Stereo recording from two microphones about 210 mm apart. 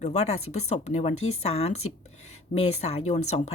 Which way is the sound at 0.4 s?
90° left.